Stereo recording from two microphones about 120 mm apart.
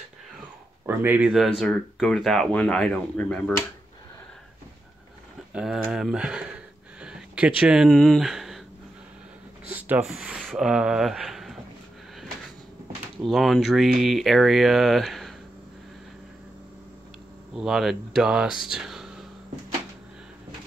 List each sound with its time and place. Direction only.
0.8 s speech: 15° right (ahead or behind)
1.3 s speech: centre (ahead or behind)
5.5 s speech: 5° right (ahead or behind)
7.0 s a sound: 10° right (ahead or behind)
7.9 s speech: 5° left (ahead or behind)
9.7 s a sound: 15° right (ahead or behind)
10.0 s speech: 5° right (ahead or behind)
13.2 s speech: centre (ahead or behind)
17.6 s speech: 5° right (ahead or behind)